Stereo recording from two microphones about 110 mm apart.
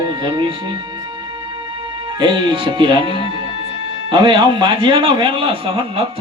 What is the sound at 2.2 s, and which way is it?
Speech, 45° right (ahead or behind).